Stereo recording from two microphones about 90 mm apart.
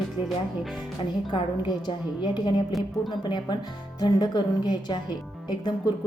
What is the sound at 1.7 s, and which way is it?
Speech, 55° left (ahead or behind).